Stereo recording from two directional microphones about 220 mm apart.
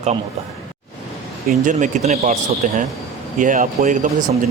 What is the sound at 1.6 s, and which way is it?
Speech, 30° right (ahead or behind).